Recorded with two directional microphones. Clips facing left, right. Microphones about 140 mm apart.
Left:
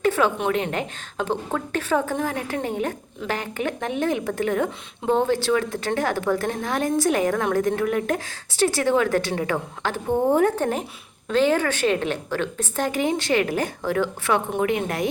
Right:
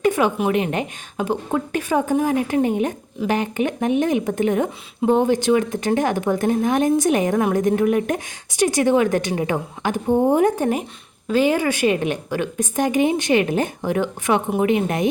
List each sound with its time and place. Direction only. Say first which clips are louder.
0.0 s speech: right 2 dB; 15° right (ahead or behind)